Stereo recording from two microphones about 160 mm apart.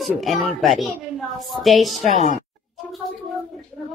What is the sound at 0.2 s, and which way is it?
A woman's voice, centre (ahead or behind).